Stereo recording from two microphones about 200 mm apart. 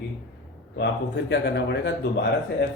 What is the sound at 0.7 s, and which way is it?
Speech, 60° left (ahead or behind).